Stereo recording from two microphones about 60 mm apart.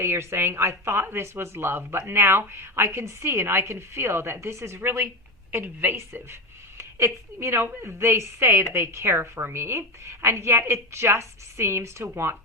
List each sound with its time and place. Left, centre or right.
0.0 s speech: right
1.0 s a woman's voice: right
6.7 s speech: right